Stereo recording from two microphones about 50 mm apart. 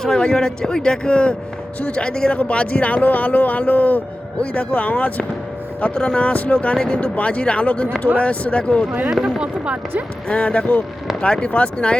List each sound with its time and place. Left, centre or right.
0.0 s a man's voice: centre; by 5.2 s left
5.8 s speech: centre
9.2 s speech: right
10.2 s speech: left